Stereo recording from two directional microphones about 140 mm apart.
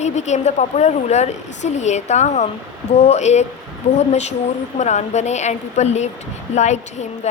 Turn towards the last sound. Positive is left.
turn(degrees=55)  # may be behind; listen again after turning